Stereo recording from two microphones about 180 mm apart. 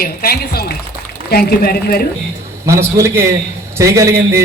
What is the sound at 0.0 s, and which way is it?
A woman's voice, 55° left (ahead or behind).